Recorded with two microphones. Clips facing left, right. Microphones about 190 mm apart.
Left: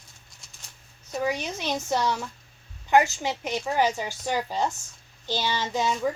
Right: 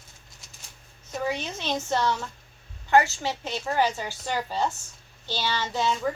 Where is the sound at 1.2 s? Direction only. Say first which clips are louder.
Left 2 dB; 10° left (ahead or behind).